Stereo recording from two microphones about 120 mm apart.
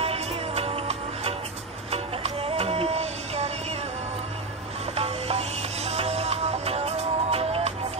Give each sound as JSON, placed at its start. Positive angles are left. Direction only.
{"t": 0.0, "sound": "music", "side_deg": -55}
{"t": 4.9, "sound": "music", "side_deg": -55}